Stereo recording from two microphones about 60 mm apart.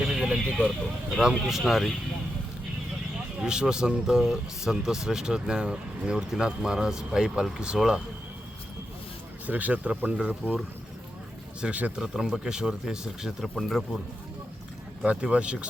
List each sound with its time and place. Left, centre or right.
0.0 s a sound: centre
1.1 s speech: centre
3.4 s speech: centre
9.5 s speech: right
11.6 s speech: right
11.9 s speech: centre
15.0 s speech: centre